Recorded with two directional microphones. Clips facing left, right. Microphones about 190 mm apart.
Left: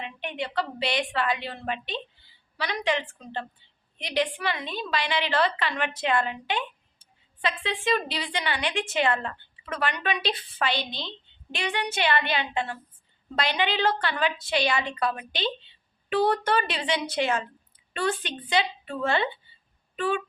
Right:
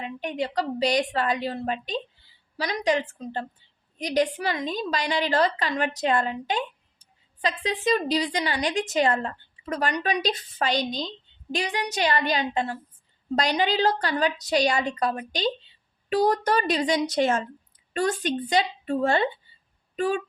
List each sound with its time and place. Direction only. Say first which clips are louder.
0.0 s a woman's voice: right 4 dB; 40° right (ahead or behind)